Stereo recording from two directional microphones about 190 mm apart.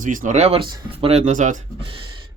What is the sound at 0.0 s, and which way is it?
Speech, 45° right (ahead or behind).